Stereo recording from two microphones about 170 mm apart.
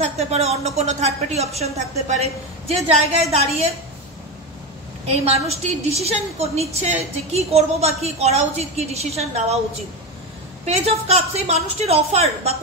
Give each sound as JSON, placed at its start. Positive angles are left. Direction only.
{"t": 0.0, "sound": "a woman's voice", "side_deg": -40}
{"t": 5.0, "sound": "a woman's voice", "side_deg": -40}
{"t": 10.6, "sound": "a woman's voice", "side_deg": -40}